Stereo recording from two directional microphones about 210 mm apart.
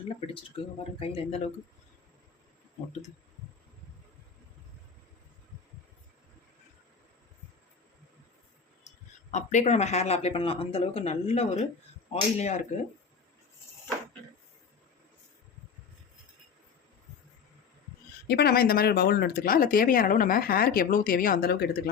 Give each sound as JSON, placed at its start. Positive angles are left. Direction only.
{"t": 0.3, "sound": "speech", "side_deg": 25}
{"t": 9.3, "sound": "speech", "side_deg": 35}
{"t": 18.3, "sound": "speech", "side_deg": 50}